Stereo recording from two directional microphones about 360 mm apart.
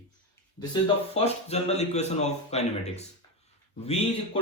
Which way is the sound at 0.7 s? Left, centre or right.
Centre.